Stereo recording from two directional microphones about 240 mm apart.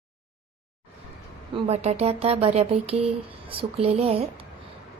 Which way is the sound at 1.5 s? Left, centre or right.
Right.